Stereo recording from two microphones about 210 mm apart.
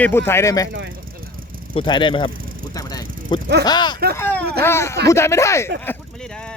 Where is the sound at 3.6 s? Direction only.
20° left (ahead or behind).